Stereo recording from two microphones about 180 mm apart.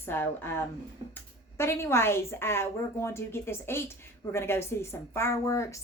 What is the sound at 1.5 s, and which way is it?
Speech, 15° left (ahead or behind).